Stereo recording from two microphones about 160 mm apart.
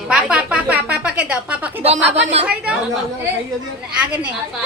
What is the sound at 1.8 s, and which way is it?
Speech, 40° right (ahead or behind).